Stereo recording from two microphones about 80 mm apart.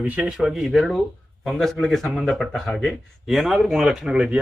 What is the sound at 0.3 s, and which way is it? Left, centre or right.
A man's voice, centre.